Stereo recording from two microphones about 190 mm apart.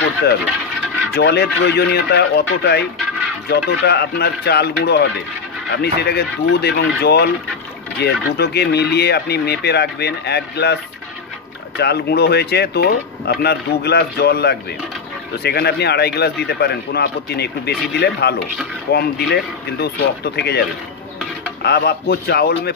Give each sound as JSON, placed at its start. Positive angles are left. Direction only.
{"t": 1.1, "sound": "speech", "side_deg": 60}
{"t": 21.6, "sound": "speech", "side_deg": 60}